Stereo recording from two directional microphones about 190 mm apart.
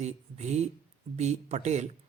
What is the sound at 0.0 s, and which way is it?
Speech, 35° right (ahead or behind).